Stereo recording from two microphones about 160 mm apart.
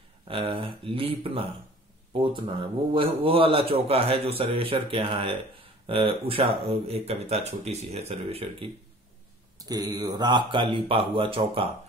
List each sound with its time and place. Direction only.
0.3 s speech: 35° right (ahead or behind)
9.6 s speech: 25° right (ahead or behind)